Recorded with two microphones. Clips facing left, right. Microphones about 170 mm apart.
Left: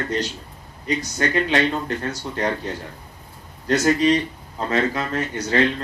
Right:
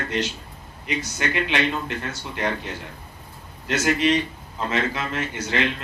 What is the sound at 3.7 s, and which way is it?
Speech, 40° left (ahead or behind).